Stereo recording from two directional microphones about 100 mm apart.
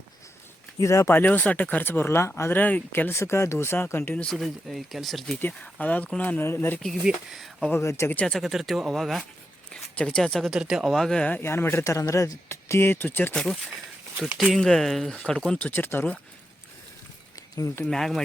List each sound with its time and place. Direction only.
0.8 s speech: 30° left (ahead or behind)
1.1 s speech: 15° left (ahead or behind)
4.1 s speech: 15° left (ahead or behind)
4.4 s speech: centre (ahead or behind)
5.4 s speech: 15° left (ahead or behind)
6.8 s speech: centre (ahead or behind)
7.8 s speech: 30° left (ahead or behind)
8.3 s speech: centre (ahead or behind)
9.7 s speech: 10° left (ahead or behind)
10.5 s speech: 5° right (ahead or behind); by 13.3 s 20° left (ahead or behind)
13.3 s speech: 5° left (ahead or behind)
15.5 s speech: 20° left (ahead or behind)
17.8 s speech: 5° left (ahead or behind)